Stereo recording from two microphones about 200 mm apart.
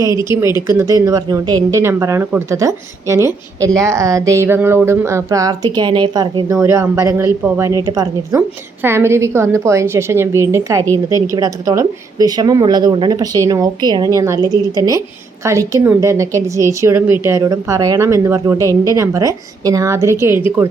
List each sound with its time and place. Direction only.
0.3 s a woman's voice: 15° right (ahead or behind)